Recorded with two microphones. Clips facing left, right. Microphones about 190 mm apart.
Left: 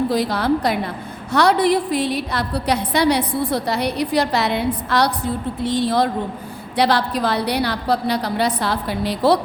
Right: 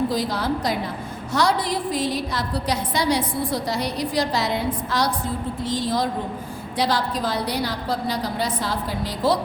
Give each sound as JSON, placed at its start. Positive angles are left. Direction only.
{"t": 0.1, "sound": "a woman's voice", "side_deg": 65}